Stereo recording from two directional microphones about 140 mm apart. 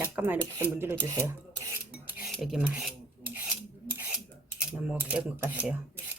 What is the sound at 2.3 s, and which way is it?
Rub, centre (ahead or behind).